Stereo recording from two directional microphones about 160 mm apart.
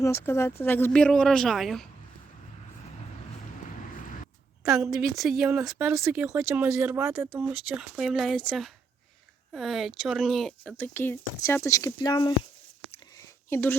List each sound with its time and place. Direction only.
0.0 s a woman's voice: 15° left (ahead or behind); by 1.9 s centre (ahead or behind)
4.6 s a woman's voice: 5° right (ahead or behind); by 12.3 s 30° left (ahead or behind)
13.1 s a sound: 15° left (ahead or behind)